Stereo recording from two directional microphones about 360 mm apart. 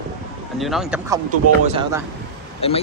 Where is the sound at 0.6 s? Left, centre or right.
Centre.